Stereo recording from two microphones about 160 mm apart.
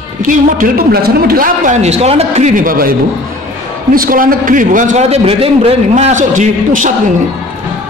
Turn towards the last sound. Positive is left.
turn(degrees=-55)  # may be behind; listen again after turning